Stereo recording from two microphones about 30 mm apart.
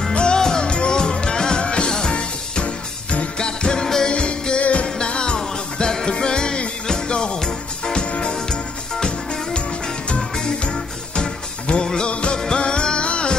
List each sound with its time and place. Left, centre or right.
0.1 s music: left
0.4 s music: left
0.7 s music: left
2.6 s music: left
3.3 s music: left
4.1 s music: left
4.8 s music: left
5.9 s music: centre
10.6 s music: left
11.8 s music: left
12.1 s music: left